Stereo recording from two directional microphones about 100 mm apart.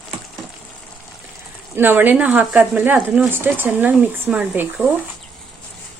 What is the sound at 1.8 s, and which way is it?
Speech, 20° right (ahead or behind).